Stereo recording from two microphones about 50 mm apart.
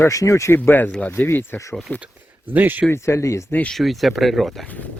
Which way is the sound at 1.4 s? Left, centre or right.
Left.